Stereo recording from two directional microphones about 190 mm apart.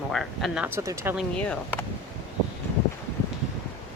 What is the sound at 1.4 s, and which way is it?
Speech, 5° left (ahead or behind).